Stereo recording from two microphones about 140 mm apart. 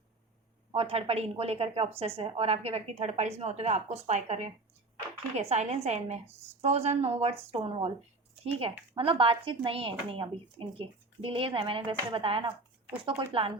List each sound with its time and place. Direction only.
0.7 s a woman's voice: 45° right (ahead or behind)
9.0 s speech: 40° right (ahead or behind)